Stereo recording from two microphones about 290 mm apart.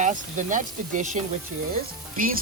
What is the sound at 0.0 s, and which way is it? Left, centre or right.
Speech, right.